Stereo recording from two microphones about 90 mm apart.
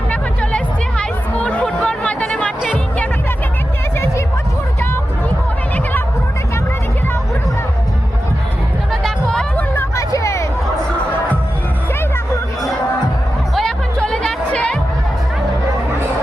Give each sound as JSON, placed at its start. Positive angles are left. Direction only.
{"t": 0.1, "sound": "music", "side_deg": 10}
{"t": 8.9, "sound": "music", "side_deg": 5}
{"t": 9.7, "sound": "hubbub", "side_deg": 35}
{"t": 13.6, "sound": "music", "side_deg": 5}